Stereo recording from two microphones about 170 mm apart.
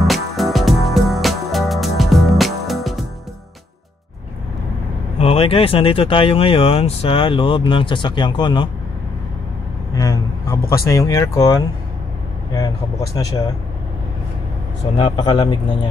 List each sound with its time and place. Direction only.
0.0 s music: centre (ahead or behind)
5.2 s speech: 35° left (ahead or behind)
9.9 s speech: 20° left (ahead or behind)
15.0 s speech: 30° left (ahead or behind)